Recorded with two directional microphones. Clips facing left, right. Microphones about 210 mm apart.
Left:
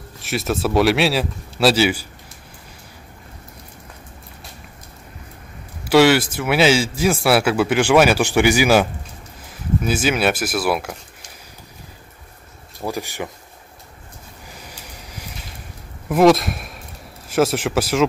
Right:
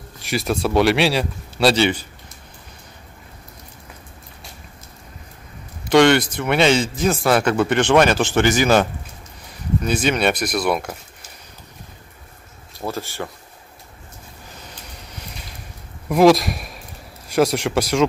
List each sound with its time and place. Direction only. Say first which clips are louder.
0.2 s a man's voice: even; centre (ahead or behind)
5.9 s a man's voice: even; 5° left (ahead or behind)
12.8 s speech: left 1 dB; 15° left (ahead or behind)
14.7 s vehicle: left 1 dB; 10° left (ahead or behind)
16.1 s a man's voice: even; centre (ahead or behind)